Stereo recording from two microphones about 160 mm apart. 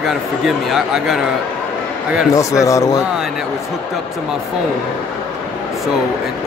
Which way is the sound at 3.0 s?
5° right (ahead or behind).